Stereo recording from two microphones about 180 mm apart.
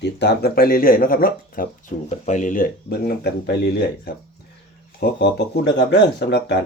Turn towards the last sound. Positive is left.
turn(degrees=70)  # may be behind; listen again after turning